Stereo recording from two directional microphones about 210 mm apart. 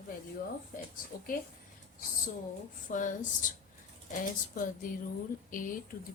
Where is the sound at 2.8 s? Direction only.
35° left (ahead or behind).